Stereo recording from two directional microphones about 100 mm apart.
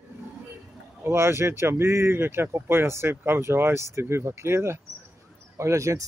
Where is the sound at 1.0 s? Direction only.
25° right (ahead or behind).